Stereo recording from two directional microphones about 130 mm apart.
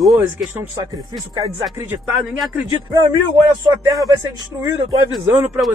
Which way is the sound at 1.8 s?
15° right (ahead or behind).